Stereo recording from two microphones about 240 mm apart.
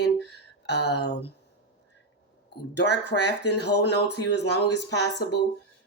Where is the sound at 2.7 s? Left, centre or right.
Left.